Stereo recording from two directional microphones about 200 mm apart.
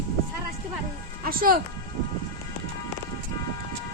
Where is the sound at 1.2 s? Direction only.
45° right (ahead or behind).